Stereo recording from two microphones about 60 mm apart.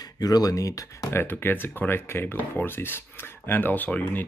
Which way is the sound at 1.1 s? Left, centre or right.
Left.